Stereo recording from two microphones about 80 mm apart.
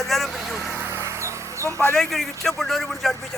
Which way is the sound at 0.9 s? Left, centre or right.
Right.